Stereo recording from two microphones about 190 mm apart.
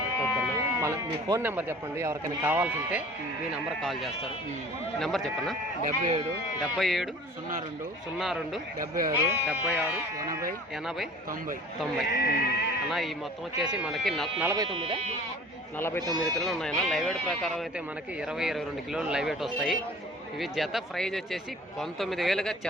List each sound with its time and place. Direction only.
0.3 s a man's voice: 15° right (ahead or behind); by 5.5 s centre (ahead or behind)
5.8 s speech: 45° right (ahead or behind)
6.6 s a man's voice: centre (ahead or behind)
9.0 s speech: 10° right (ahead or behind)
10.8 s a man's voice: centre (ahead or behind)
12.1 s speech: 55° left (ahead or behind)
13.6 s a man's voice: centre (ahead or behind)
14.4 s speech: 20° right (ahead or behind)
15.8 s speech: 15° left (ahead or behind)
16.0 s speech: 20° right (ahead or behind)
16.4 s a man's voice: centre (ahead or behind)